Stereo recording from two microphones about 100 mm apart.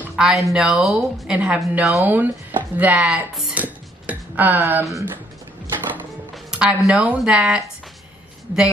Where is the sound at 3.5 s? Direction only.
15° right (ahead or behind).